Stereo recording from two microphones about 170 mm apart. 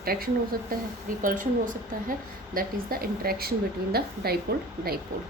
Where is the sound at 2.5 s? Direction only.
60° right (ahead or behind).